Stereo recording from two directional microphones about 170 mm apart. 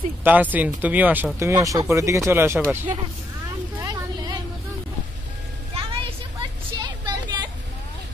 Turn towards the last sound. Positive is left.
turn(degrees=-25)  # may be behind; listen again after turning